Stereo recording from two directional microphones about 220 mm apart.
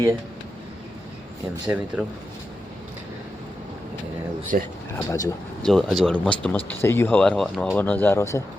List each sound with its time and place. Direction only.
1.6 s speech: 5° right (ahead or behind)
4.5 s speech: 35° right (ahead or behind)
4.9 s speech: 15° left (ahead or behind)
5.6 s speech: centre (ahead or behind)